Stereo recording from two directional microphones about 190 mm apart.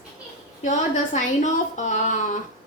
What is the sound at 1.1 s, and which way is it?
A woman's voice, 40° left (ahead or behind).